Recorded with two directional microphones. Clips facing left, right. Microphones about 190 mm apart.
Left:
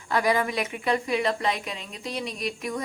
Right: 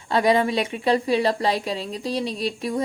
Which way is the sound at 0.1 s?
25° right (ahead or behind).